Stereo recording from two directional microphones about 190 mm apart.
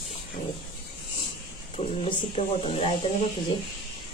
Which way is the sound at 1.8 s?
30° left (ahead or behind).